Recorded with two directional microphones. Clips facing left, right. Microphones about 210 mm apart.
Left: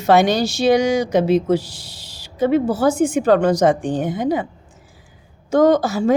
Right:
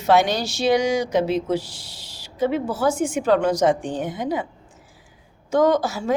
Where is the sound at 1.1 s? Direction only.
45° left (ahead or behind).